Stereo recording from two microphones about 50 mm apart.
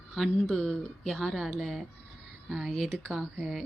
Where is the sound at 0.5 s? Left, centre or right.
Centre.